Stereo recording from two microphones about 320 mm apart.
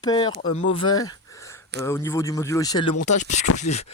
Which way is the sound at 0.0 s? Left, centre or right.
Centre.